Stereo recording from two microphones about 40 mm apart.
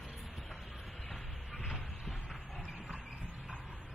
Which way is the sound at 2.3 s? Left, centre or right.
Centre.